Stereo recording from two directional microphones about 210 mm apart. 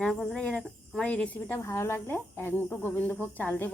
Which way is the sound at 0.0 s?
Centre (ahead or behind).